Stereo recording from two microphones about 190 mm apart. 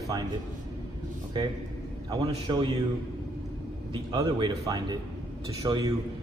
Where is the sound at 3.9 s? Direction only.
25° right (ahead or behind).